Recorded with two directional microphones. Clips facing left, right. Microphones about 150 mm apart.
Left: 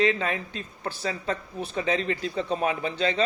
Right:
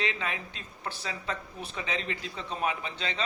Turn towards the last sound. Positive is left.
turn(degrees=45)  # may be behind; listen again after turning